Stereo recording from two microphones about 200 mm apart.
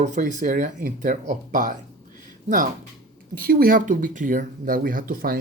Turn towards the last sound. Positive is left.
turn(degrees=-45)  # may be behind; listen again after turning